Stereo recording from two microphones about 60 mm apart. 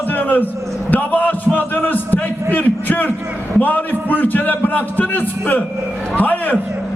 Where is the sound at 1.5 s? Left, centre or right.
Left.